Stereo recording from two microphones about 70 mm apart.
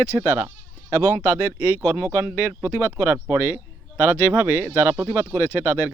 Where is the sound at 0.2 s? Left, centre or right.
Right.